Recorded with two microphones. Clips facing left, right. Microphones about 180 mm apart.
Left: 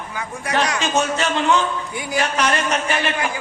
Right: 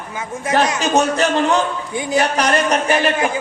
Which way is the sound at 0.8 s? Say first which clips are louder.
Right 4 dB; 40° right (ahead or behind).